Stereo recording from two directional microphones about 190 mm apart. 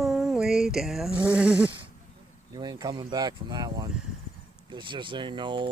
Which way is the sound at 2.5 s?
20° right (ahead or behind).